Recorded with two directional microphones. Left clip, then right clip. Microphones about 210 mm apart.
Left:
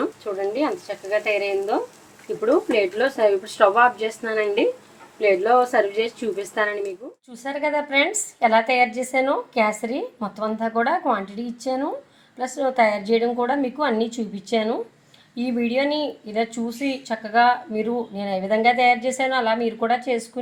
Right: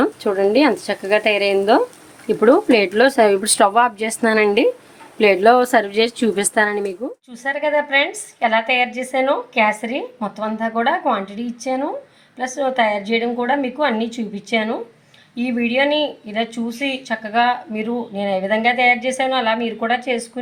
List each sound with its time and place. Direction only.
0.0 s a woman's voice: 55° right (ahead or behind)
7.4 s speech: 20° left (ahead or behind)